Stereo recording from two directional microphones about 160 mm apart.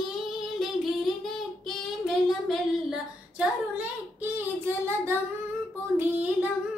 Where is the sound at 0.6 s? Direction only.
Centre (ahead or behind).